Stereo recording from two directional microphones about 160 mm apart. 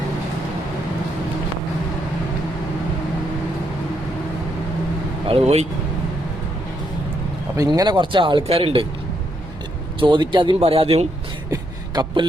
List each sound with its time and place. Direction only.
5.2 s speech: 40° right (ahead or behind)
7.5 s speech: 20° right (ahead or behind)
10.0 s speech: 30° right (ahead or behind)
11.5 s a sound: 25° right (ahead or behind)